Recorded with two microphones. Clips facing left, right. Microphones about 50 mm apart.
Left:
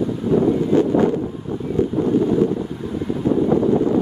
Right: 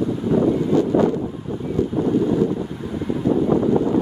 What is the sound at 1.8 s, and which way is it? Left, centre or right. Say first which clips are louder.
Wind noise: left 2 dB; left.